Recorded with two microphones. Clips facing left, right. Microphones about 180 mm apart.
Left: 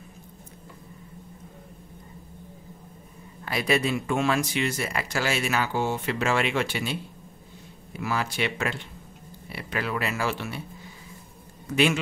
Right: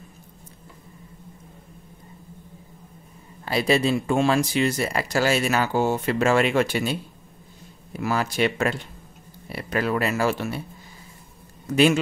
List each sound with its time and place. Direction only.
3.4 s speech: 30° right (ahead or behind)
8.0 s speech: 40° right (ahead or behind)
11.7 s speech: 40° right (ahead or behind)